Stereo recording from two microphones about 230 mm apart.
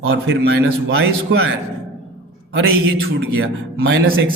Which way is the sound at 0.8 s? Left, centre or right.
Right.